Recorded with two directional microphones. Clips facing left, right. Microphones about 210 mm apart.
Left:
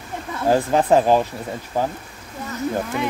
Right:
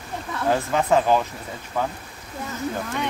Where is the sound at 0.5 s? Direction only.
30° left (ahead or behind).